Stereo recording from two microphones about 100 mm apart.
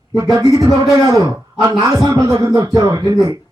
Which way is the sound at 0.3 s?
35° right (ahead or behind).